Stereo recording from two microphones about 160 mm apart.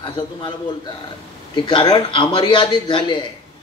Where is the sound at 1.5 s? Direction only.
30° left (ahead or behind).